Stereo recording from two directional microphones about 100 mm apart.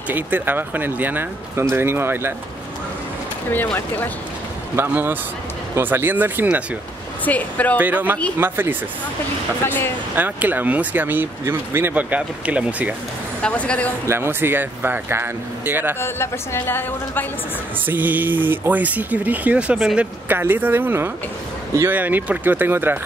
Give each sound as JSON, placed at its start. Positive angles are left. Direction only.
{"t": 0.1, "sound": "speech", "side_deg": -20}
{"t": 3.5, "sound": "a woman's voice", "side_deg": 20}
{"t": 4.7, "sound": "speech", "side_deg": -20}
{"t": 7.2, "sound": "speech", "side_deg": 15}
{"t": 7.8, "sound": "speech", "side_deg": -20}
{"t": 10.1, "sound": "speech", "side_deg": -15}
{"t": 13.4, "sound": "speech", "side_deg": 10}
{"t": 14.0, "sound": "speech", "side_deg": -25}
{"t": 16.0, "sound": "a woman's voice", "side_deg": 25}
{"t": 17.8, "sound": "speech", "side_deg": -20}
{"t": 20.2, "sound": "speech", "side_deg": -20}